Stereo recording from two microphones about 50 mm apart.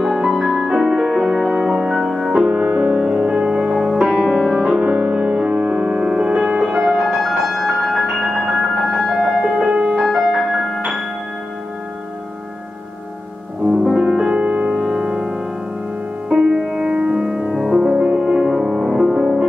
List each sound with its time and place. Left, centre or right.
0.0 s music: centre
1.7 s music: centre
4.8 s music: right
7.2 s music: centre
9.7 s music: right
10.0 s music: centre
13.7 s music: centre; by 14.8 s right
14.8 s music: centre
16.9 s music: right
17.6 s music: centre
17.9 s music: centre